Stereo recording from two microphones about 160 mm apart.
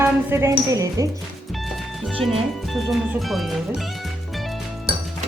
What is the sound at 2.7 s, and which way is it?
Speech, centre (ahead or behind).